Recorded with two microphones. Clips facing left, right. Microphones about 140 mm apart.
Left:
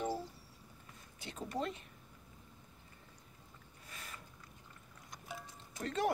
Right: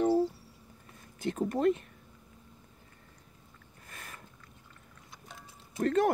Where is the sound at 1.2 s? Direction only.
50° right (ahead or behind).